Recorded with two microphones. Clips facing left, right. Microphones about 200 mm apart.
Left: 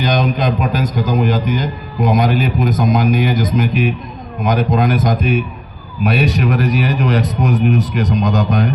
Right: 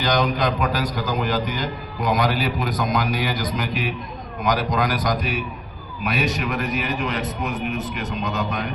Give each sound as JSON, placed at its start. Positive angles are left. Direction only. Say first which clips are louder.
{"t": 0.0, "sound": "a man's voice", "louder": "left 4 dB", "side_deg": 20}
{"t": 6.1, "sound": "a man's voice", "louder": "left 8 dB", "side_deg": 35}